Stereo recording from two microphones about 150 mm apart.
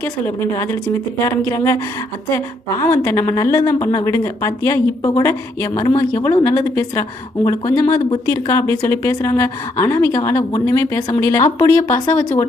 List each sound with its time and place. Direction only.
0.0 s a woman's voice: 15° left (ahead or behind)